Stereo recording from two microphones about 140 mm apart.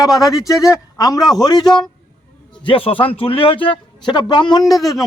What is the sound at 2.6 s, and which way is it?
A man's voice, 40° left (ahead or behind).